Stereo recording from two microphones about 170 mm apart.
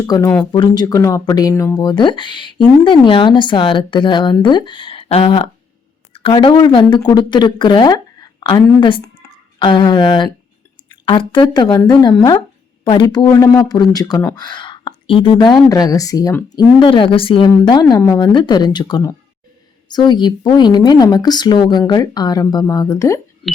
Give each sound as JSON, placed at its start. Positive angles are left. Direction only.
{"t": 0.0, "sound": "speech", "side_deg": 15}
{"t": 14.3, "sound": "a sound", "side_deg": 25}
{"t": 15.7, "sound": "speech", "side_deg": 20}